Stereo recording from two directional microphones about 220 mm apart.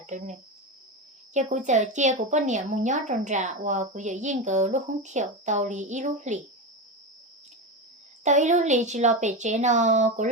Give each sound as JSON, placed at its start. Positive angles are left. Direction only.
{"t": 0.0, "sound": "cricket", "side_deg": -35}
{"t": 1.3, "sound": "a woman's voice", "side_deg": -35}
{"t": 8.2, "sound": "a woman's voice", "side_deg": -35}